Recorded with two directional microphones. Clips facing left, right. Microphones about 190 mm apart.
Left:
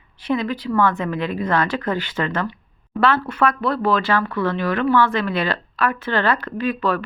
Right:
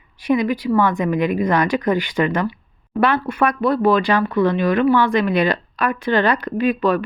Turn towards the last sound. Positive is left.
turn(degrees=-15)  # may be behind; listen again after turning